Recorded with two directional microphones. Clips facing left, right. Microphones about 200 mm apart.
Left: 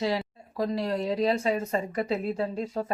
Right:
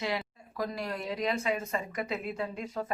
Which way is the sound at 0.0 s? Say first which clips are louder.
Left 5 dB; 30° left (ahead or behind).